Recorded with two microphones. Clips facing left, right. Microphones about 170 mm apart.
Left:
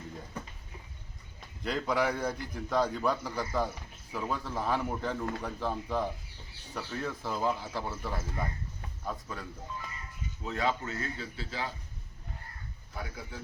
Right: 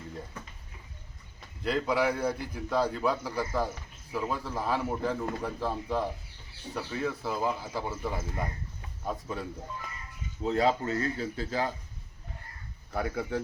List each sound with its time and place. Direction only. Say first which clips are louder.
1.6 s a man's voice: right 2 dB; 5° right (ahead or behind)
9.0 s speech: right 4 dB; 25° right (ahead or behind); by 11.7 s 45° right (ahead or behind)
12.9 s speech: right 11 dB; 65° right (ahead or behind)